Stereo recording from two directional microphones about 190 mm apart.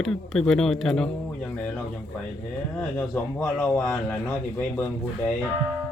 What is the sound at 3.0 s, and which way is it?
A man's voice, 10° left (ahead or behind).